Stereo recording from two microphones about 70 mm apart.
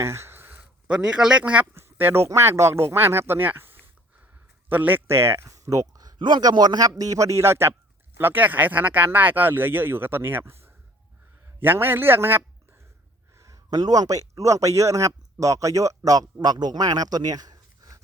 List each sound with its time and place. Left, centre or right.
0.0 s a sound: right
0.9 s speech: centre
1.7 s speech: right
5.5 s a man's voice: right
8.2 s speech: right
13.3 s a man's voice: right